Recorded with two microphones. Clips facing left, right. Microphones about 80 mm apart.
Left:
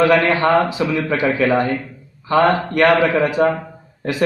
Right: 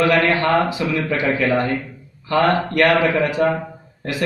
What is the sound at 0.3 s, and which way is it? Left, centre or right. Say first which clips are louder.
A man's voice: left 2 dB; left.